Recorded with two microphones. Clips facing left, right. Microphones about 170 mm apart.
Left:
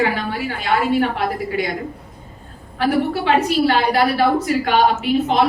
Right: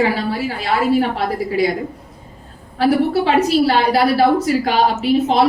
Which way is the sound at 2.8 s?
35° right (ahead or behind).